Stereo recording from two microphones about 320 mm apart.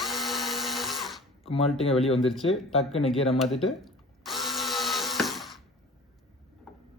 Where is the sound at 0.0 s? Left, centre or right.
Centre.